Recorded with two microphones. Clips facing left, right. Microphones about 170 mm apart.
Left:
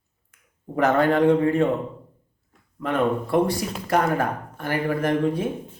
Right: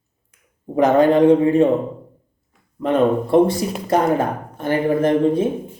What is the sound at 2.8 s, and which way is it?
Speech, 20° right (ahead or behind).